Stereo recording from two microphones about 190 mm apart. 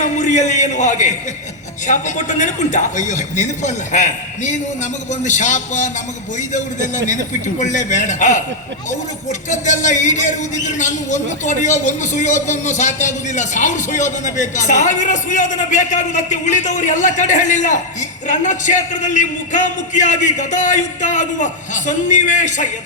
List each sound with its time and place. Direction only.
0.0 s a man's voice: 40° left (ahead or behind)
9.5 s a man's voice: 40° left (ahead or behind)